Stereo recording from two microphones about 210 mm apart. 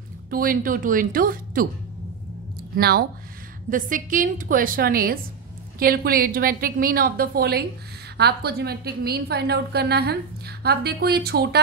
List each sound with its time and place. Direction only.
0.3 s a woman's voice: 45° right (ahead or behind)
2.7 s a woman's voice: 45° right (ahead or behind)